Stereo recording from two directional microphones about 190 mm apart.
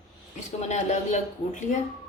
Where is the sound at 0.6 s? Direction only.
40° left (ahead or behind).